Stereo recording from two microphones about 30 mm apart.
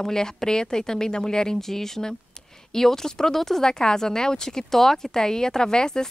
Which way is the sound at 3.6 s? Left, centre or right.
Left.